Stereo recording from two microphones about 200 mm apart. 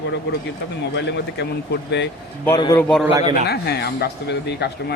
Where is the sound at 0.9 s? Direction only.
60° left (ahead or behind).